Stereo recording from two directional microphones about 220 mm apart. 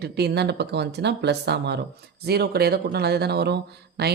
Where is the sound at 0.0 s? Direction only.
50° right (ahead or behind).